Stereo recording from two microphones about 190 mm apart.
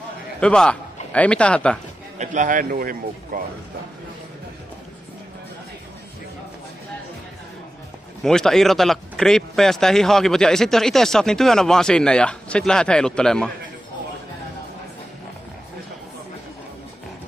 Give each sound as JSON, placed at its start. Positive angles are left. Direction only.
{"t": 0.4, "sound": "speech", "side_deg": 5}
{"t": 2.1, "sound": "a man's voice", "side_deg": -40}
{"t": 8.2, "sound": "speech", "side_deg": 5}